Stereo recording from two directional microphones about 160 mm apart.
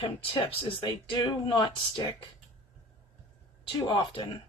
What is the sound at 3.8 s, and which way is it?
Speech, 30° left (ahead or behind).